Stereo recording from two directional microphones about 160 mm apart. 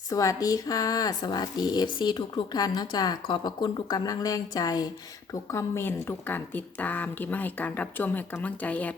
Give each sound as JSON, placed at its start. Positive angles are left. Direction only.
{"t": 0.1, "sound": "speech", "side_deg": 20}